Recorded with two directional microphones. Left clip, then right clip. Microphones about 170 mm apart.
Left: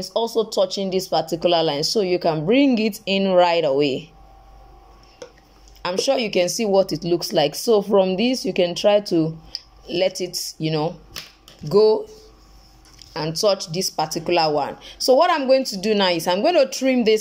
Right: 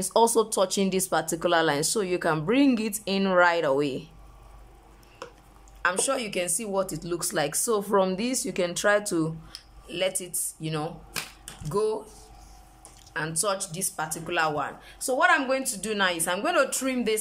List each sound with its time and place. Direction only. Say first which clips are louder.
0.1 s speech: even; 10° right (ahead or behind); by 4.1 s 10° left (ahead or behind)
5.8 s speech: left 5 dB; 20° left (ahead or behind)
9.8 s speech: left 7 dB; 20° left (ahead or behind)
13.1 s speech: left 8 dB; 20° left (ahead or behind)